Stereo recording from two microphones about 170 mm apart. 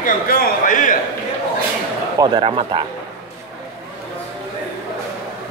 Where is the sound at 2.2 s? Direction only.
30° right (ahead or behind).